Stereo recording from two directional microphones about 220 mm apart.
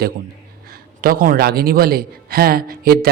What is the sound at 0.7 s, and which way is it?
A man's voice, 40° right (ahead or behind).